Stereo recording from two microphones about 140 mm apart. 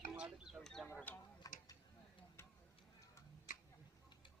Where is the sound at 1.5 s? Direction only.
25° left (ahead or behind).